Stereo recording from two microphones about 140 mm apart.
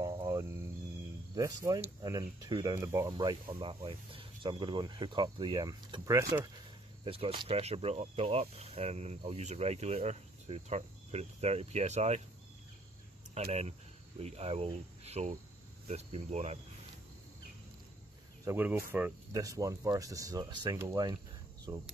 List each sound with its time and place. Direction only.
0.0 s cricket: 30° right (ahead or behind)
1.3 s speech: 25° right (ahead or behind)
3.1 s speech: 30° right (ahead or behind)
7.1 s speech: 40° right (ahead or behind)
13.3 s speech: 50° right (ahead or behind)
18.4 s speech: 15° right (ahead or behind)